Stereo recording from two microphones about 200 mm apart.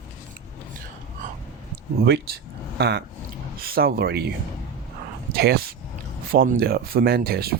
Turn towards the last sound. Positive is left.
turn(degrees=-50)  # may be behind; listen again after turning